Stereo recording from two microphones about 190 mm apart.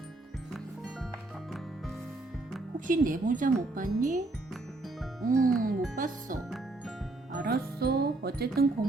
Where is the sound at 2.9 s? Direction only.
45° right (ahead or behind).